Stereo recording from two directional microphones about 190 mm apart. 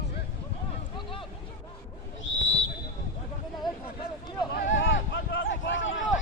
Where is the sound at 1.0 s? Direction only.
25° left (ahead or behind).